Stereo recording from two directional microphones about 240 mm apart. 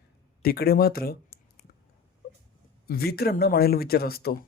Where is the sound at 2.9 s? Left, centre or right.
Left.